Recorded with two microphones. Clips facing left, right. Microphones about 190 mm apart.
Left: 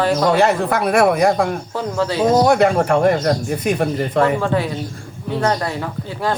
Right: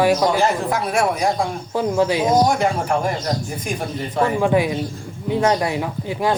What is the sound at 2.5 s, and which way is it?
Speech, 65° left (ahead or behind).